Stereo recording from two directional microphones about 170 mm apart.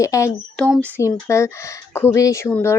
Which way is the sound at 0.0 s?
20° left (ahead or behind).